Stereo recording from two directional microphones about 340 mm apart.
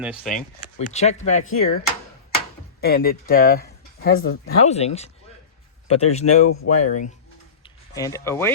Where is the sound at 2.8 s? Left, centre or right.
Left.